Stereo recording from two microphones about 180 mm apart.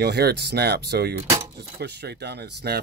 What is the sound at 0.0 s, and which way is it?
Speech, 65° right (ahead or behind).